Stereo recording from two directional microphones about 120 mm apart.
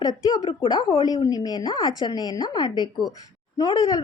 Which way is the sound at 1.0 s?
30° left (ahead or behind).